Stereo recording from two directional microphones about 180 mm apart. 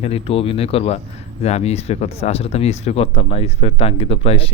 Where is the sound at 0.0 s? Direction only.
35° left (ahead or behind).